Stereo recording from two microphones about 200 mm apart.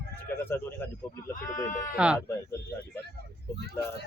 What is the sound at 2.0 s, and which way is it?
Speech, 5° right (ahead or behind).